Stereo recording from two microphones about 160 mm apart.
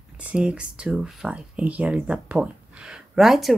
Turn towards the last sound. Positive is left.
turn(degrees=0)  # may be behind; listen again after turning